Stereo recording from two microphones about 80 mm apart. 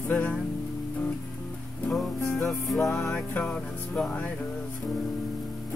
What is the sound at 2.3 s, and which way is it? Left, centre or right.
Music, centre.